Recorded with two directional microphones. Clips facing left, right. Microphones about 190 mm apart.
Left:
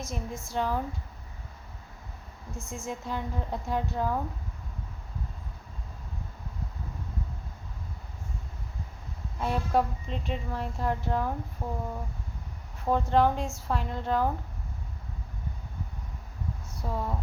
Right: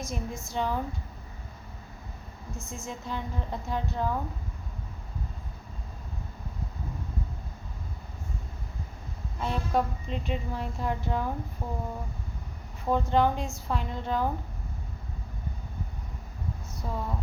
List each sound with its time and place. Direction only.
0.0 s speech: 5° left (ahead or behind)
2.6 s a woman's voice: 10° left (ahead or behind)
9.4 s a woman's voice: 10° left (ahead or behind)
12.8 s speech: centre (ahead or behind)
16.8 s a woman's voice: 10° left (ahead or behind)